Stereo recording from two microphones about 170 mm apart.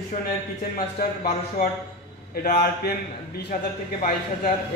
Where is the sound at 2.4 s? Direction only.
65° left (ahead or behind).